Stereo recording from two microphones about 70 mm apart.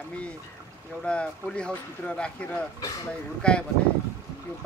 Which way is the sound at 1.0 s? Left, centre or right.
Centre.